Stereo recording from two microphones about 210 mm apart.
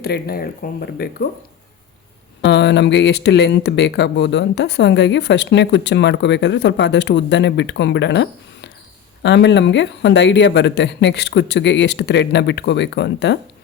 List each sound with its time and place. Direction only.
0.0 s speech: 50° left (ahead or behind)
2.4 s speech: 55° left (ahead or behind)